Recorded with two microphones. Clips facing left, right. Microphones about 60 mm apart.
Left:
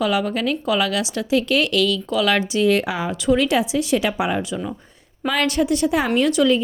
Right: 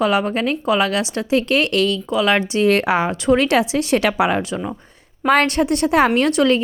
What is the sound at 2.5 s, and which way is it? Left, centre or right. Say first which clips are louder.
Speech: right 3 dB; right.